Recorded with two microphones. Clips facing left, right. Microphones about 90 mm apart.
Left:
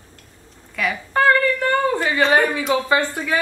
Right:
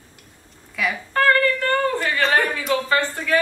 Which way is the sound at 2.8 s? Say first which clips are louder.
Left 1 dB; 15° left (ahead or behind).